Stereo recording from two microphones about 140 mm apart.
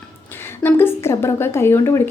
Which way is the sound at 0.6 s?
15° left (ahead or behind).